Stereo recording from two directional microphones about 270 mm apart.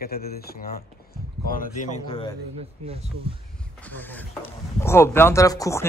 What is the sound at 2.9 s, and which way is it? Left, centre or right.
Speech, right.